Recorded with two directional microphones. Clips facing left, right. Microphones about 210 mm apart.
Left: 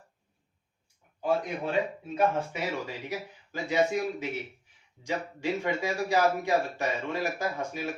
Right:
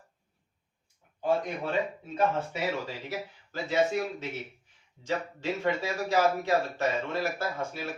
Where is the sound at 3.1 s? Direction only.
15° left (ahead or behind).